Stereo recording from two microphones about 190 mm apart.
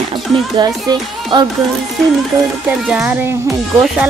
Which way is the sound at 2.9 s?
5° right (ahead or behind).